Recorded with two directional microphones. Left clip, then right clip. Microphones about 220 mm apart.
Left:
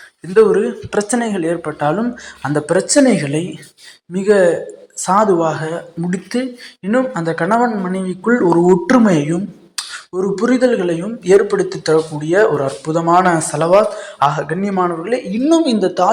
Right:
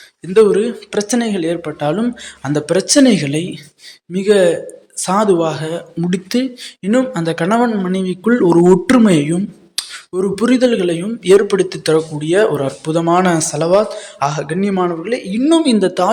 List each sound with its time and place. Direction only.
0.3 s speech: 20° right (ahead or behind)
15.0 s speech: 15° right (ahead or behind)